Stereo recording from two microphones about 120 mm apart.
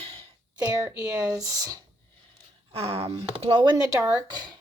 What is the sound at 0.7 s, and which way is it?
A woman's voice, 30° right (ahead or behind).